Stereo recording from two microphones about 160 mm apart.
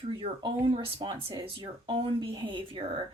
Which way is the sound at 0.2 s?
30° right (ahead or behind).